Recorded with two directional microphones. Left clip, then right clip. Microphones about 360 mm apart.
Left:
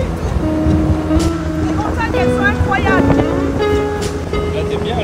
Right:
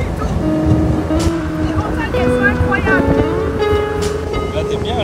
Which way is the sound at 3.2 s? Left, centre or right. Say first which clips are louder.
Even; centre.